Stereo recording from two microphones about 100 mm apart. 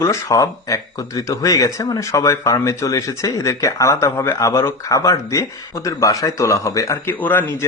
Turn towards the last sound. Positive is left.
turn(degrees=20)  # may be behind; listen again after turning